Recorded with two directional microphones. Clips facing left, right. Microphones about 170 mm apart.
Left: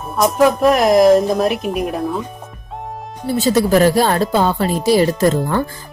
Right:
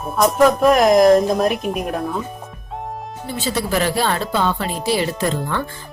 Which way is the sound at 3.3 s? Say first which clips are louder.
Left 8 dB; 40° left (ahead or behind).